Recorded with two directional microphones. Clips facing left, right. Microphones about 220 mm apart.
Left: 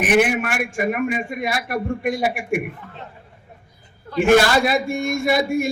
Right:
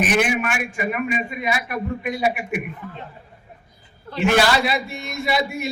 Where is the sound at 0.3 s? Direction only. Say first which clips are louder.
Left 2 dB; 55° left (ahead or behind).